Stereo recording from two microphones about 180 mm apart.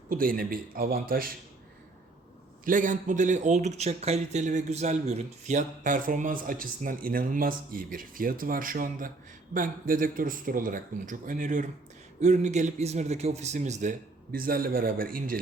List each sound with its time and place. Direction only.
0.1 s speech: 50° right (ahead or behind)
2.6 s a man's voice: 45° right (ahead or behind)
14.3 s speech: 55° right (ahead or behind)